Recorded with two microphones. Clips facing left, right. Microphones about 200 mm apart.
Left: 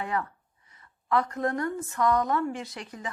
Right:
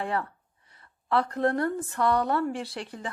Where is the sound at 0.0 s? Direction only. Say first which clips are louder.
Right 1 dB; 30° right (ahead or behind).